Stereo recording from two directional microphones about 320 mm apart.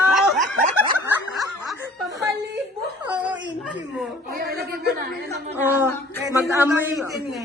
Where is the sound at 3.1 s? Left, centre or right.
Centre.